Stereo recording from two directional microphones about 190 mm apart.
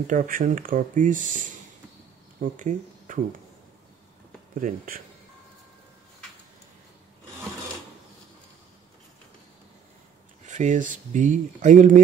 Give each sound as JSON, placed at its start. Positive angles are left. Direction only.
{"t": 0.0, "sound": "speech", "side_deg": -45}
{"t": 4.6, "sound": "speech", "side_deg": -45}
{"t": 10.4, "sound": "speech", "side_deg": -40}